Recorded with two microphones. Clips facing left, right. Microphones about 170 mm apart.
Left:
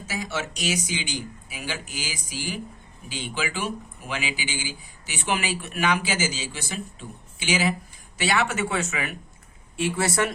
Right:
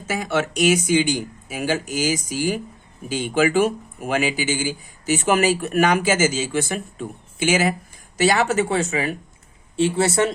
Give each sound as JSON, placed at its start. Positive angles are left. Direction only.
{"t": 0.0, "sound": "speech", "side_deg": -55}